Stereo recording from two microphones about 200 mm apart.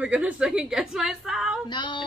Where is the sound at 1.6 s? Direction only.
25° left (ahead or behind).